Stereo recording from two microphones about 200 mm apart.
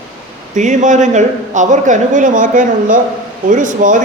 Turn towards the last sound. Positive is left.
turn(degrees=-40)  # may be behind; listen again after turning